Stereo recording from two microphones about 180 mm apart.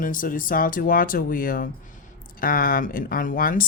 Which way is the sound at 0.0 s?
50° left (ahead or behind).